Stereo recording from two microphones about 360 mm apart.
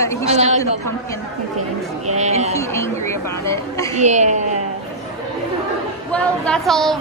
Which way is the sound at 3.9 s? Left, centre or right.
Centre.